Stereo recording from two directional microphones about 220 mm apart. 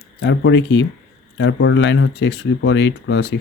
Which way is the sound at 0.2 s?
55° left (ahead or behind).